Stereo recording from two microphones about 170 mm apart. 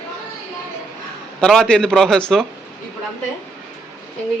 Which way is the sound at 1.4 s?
5° left (ahead or behind).